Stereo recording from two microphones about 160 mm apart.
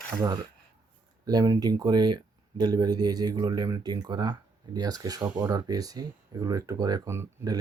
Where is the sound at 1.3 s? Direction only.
25° right (ahead or behind).